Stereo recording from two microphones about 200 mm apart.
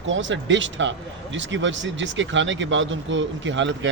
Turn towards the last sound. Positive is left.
turn(degrees=-65)  # may be behind; listen again after turning